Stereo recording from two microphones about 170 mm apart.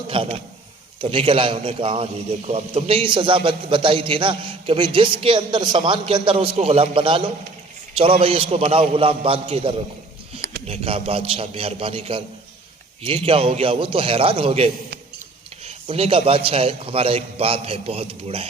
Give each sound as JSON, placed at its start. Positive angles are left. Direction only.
{"t": 0.1, "sound": "a man's voice", "side_deg": -30}